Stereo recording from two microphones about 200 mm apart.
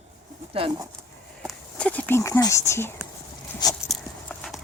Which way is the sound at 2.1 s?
15° left (ahead or behind).